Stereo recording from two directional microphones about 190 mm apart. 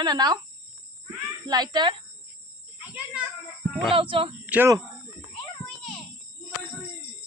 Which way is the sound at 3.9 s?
25° right (ahead or behind).